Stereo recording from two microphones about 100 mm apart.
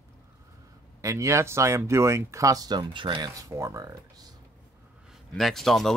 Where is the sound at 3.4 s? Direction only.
30° right (ahead or behind).